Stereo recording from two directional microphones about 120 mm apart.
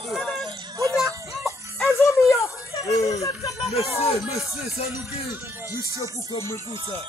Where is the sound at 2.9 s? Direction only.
30° left (ahead or behind).